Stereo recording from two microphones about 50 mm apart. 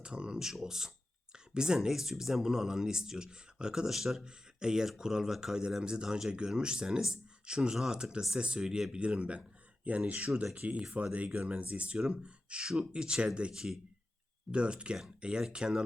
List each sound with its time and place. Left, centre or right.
0.0 s speech: centre
14.5 s speech: right